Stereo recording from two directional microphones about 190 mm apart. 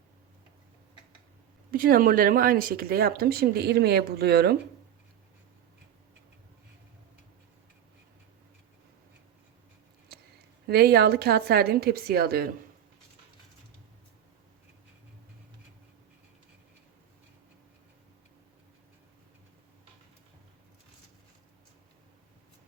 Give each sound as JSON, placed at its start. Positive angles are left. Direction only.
{"t": 1.7, "sound": "speech", "side_deg": -45}
{"t": 10.7, "sound": "speech", "side_deg": -55}